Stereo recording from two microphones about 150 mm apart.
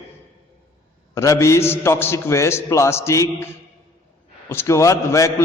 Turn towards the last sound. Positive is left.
turn(degrees=20)  # may be behind; listen again after turning